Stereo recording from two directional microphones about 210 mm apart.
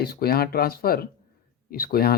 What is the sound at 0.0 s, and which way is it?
Speech, 45° left (ahead or behind).